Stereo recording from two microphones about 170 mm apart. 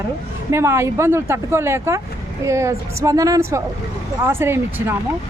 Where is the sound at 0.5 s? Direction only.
15° right (ahead or behind).